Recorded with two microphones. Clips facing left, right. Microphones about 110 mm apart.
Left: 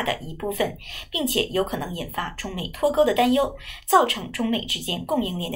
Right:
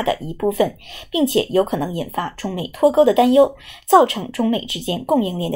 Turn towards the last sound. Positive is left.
turn(degrees=-25)  # may be behind; listen again after turning